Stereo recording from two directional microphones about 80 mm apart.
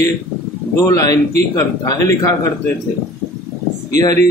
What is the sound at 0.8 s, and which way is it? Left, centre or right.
Speech, left.